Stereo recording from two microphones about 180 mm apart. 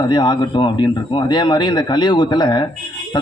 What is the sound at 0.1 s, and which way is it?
Speech, 25° left (ahead or behind).